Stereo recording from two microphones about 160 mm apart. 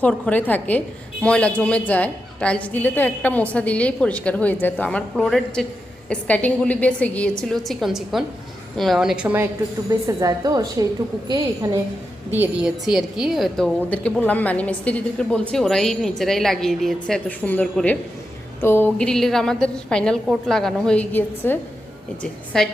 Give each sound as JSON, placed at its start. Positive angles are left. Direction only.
{"t": 0.0, "sound": "a woman's voice", "side_deg": 10}
{"t": 12.3, "sound": "a woman's voice", "side_deg": -10}